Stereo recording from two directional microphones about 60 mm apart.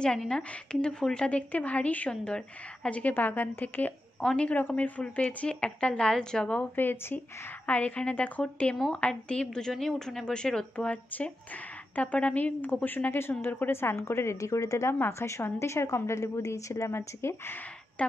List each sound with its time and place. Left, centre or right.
0.0 s a woman's voice: centre
1.5 s a woman's voice: left
3.0 s a woman's voice: left; by 6.5 s centre
6.5 s a woman's voice: left; by 10.9 s centre
10.9 s a woman's voice: left
13.9 s a woman's voice: left
14.9 s a woman's voice: left
16.9 s speech: left